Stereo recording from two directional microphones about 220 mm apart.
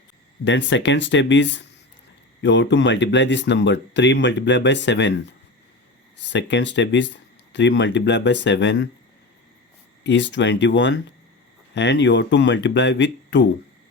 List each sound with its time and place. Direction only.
0.4 s speech: 55° left (ahead or behind)
6.3 s speech: 55° left (ahead or behind)
10.0 s speech: 55° left (ahead or behind)